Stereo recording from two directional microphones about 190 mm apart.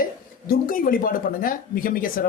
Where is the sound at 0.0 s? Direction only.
50° left (ahead or behind).